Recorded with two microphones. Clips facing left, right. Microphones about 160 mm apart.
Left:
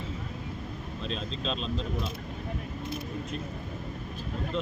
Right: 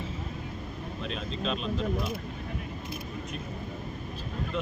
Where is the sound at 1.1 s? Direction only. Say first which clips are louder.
Right 1 dB; 10° right (ahead or behind).